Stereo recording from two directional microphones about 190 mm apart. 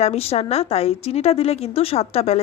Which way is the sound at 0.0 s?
35° left (ahead or behind).